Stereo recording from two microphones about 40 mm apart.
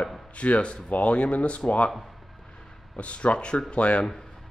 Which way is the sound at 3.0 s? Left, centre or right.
Left.